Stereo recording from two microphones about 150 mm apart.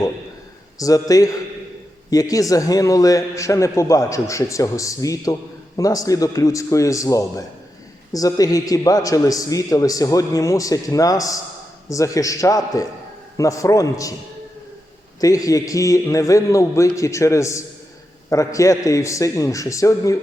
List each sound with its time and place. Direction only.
0.8 s a man's voice: 25° left (ahead or behind)
15.2 s a man's voice: 25° left (ahead or behind)